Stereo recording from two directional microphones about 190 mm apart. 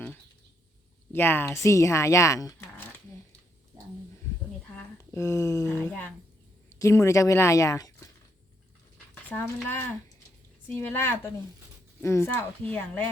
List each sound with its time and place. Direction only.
1.1 s a woman's voice: 10° left (ahead or behind)
4.8 s a woman's voice: 15° left (ahead or behind)
9.6 s a woman's voice: 10° left (ahead or behind)